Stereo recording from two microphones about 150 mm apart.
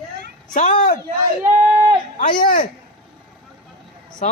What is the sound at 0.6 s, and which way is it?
Speech, 55° left (ahead or behind).